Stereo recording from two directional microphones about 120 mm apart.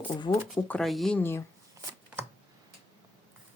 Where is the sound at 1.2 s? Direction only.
20° left (ahead or behind).